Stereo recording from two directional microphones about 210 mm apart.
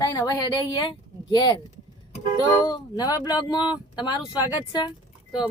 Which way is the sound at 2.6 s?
20° left (ahead or behind).